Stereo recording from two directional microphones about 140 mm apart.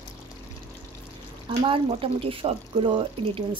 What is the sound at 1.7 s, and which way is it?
Speech, 40° right (ahead or behind).